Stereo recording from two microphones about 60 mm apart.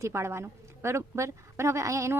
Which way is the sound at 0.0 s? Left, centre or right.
Right.